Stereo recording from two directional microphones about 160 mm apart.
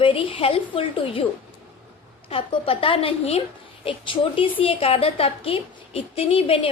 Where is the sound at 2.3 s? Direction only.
35° left (ahead or behind).